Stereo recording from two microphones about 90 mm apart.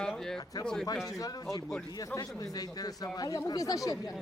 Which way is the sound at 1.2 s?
45° left (ahead or behind).